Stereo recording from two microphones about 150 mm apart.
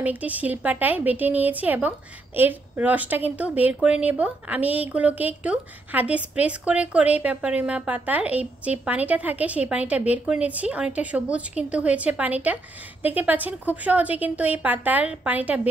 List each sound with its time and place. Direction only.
0.0 s a woman's voice: 10° right (ahead or behind)